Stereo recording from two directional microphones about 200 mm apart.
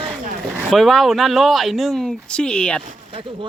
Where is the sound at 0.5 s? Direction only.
Centre (ahead or behind).